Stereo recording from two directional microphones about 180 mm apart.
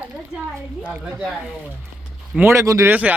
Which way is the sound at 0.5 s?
10° right (ahead or behind).